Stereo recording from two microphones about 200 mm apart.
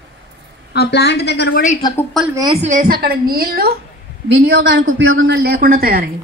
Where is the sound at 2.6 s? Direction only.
40° right (ahead or behind).